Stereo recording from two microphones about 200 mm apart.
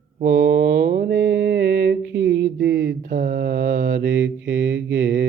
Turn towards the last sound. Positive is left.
turn(degrees=-60)  # may be behind; listen again after turning